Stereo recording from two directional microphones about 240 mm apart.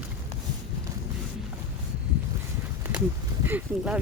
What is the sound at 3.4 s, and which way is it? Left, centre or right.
Speech, centre.